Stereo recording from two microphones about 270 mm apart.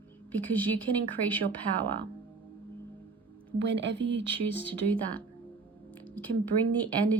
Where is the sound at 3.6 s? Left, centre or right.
Right.